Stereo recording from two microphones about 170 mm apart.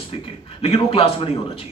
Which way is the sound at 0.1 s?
35° left (ahead or behind).